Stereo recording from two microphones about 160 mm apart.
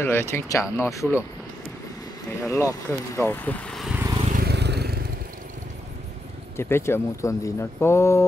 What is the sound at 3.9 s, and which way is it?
Vehicle, 15° right (ahead or behind).